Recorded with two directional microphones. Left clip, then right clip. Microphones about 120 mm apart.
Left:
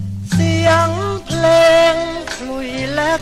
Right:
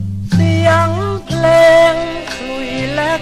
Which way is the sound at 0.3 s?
15° left (ahead or behind).